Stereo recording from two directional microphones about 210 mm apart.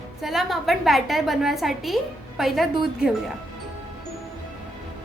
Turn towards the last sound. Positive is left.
turn(degrees=0)  # may be behind; listen again after turning